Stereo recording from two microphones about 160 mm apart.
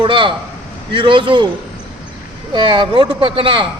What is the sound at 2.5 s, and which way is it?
A man's voice, 30° right (ahead or behind).